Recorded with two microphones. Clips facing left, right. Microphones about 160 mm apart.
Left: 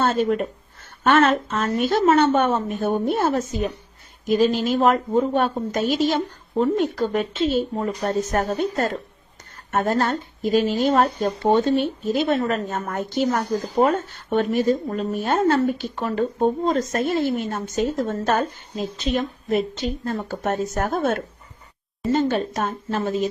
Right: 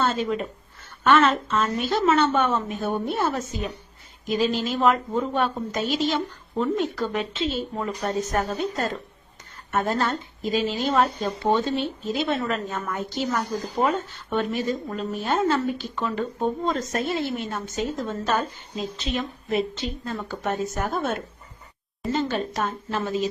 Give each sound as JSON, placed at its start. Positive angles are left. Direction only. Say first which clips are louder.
{"t": 0.0, "sound": "speech", "louder": "left 4 dB", "side_deg": 50}